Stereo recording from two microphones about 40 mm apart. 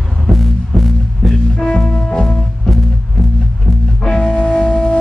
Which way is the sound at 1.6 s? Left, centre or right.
Centre.